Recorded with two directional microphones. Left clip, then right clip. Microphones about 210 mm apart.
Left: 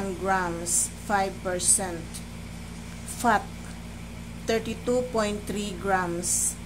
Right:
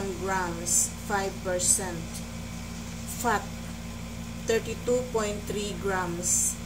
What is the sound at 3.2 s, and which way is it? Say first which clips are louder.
Speech: left 4 dB; 40° left (ahead or behind).